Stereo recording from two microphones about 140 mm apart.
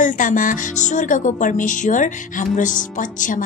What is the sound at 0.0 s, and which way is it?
A woman's voice, 70° left (ahead or behind).